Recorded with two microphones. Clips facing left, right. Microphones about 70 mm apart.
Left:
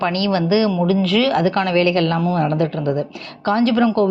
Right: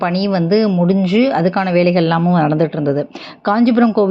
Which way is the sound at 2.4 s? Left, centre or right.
Right.